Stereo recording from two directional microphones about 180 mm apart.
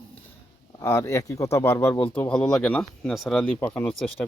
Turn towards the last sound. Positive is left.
turn(degrees=10)  # may be behind; listen again after turning